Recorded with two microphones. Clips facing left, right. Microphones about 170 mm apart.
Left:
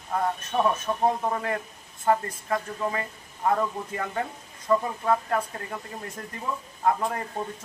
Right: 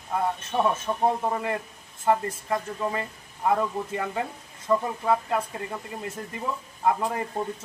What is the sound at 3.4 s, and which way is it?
A man's voice, 10° right (ahead or behind).